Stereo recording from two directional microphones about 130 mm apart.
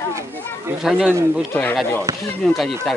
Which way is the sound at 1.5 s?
15° left (ahead or behind).